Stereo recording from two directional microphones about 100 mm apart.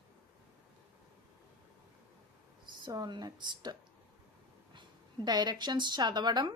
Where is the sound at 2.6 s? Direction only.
45° right (ahead or behind).